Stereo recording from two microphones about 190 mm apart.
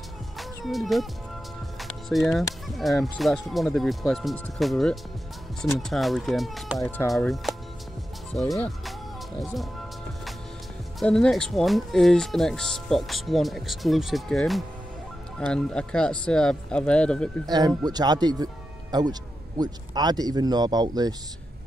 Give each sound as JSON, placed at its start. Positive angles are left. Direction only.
{"t": 0.7, "sound": "speech", "side_deg": 0}
{"t": 1.8, "sound": "music", "side_deg": 0}
{"t": 2.7, "sound": "speech", "side_deg": 0}
{"t": 11.0, "sound": "speech", "side_deg": 0}
{"t": 17.5, "sound": "speech", "side_deg": -20}